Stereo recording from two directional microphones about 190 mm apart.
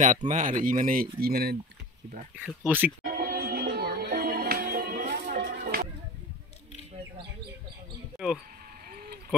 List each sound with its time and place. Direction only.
0.0 s speech: 40° right (ahead or behind)
2.4 s speech: 10° right (ahead or behind)
3.2 s music: 55° right (ahead or behind)
8.2 s speech: 5° right (ahead or behind)
8.9 s vehicle: 50° right (ahead or behind)